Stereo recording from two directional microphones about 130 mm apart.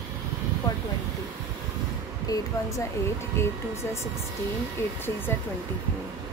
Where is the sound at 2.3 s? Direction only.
30° left (ahead or behind).